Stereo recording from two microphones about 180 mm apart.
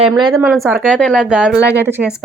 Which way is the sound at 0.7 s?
5° left (ahead or behind).